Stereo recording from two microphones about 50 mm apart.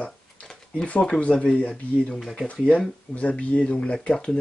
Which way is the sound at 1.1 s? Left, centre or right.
Left.